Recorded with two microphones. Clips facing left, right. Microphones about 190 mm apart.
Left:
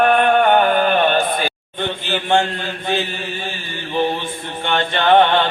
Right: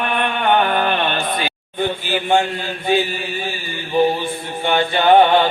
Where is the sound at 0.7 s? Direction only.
45° left (ahead or behind).